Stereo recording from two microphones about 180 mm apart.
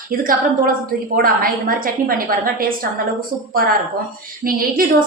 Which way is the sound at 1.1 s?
55° right (ahead or behind).